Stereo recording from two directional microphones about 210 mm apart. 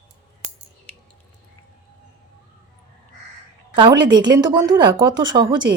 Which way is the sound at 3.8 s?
20° right (ahead or behind).